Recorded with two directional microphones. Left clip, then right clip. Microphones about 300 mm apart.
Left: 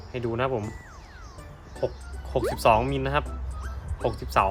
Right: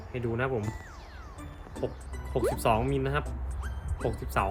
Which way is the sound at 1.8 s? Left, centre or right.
Left.